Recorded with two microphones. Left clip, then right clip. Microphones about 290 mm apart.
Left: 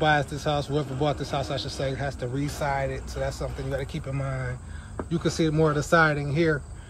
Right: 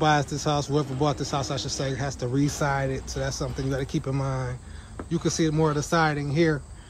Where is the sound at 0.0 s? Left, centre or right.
Centre.